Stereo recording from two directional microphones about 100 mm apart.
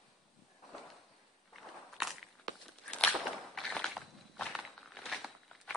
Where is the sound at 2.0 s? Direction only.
Centre (ahead or behind).